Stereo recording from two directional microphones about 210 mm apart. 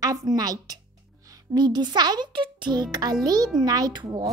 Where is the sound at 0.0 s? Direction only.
15° right (ahead or behind).